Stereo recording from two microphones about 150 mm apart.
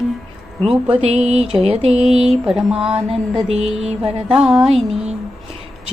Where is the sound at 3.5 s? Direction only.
45° right (ahead or behind).